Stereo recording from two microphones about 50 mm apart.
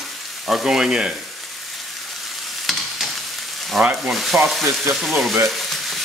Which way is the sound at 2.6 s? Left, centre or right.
Centre.